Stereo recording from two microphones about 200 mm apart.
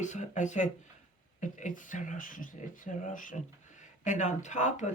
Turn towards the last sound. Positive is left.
turn(degrees=35)  # may be behind; listen again after turning